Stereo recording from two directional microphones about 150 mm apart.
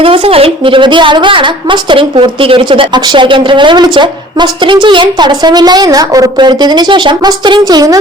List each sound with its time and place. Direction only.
0.0 s a woman's voice: 40° right (ahead or behind)